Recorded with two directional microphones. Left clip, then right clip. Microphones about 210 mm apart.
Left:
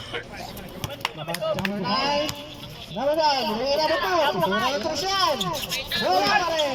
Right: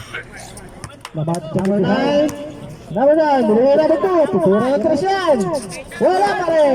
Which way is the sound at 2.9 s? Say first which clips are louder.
Right 9 dB; 35° right (ahead or behind).